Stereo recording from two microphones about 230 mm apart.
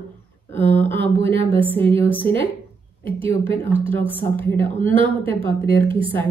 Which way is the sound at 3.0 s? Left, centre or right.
Right.